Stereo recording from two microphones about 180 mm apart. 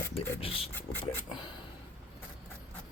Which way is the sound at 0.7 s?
10° left (ahead or behind).